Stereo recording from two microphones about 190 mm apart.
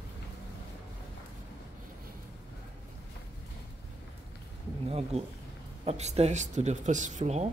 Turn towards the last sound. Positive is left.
turn(degrees=-35)  # may be behind; listen again after turning